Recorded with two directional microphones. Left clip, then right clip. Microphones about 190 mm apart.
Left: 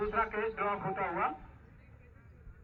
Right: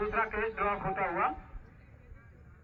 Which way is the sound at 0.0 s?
20° right (ahead or behind).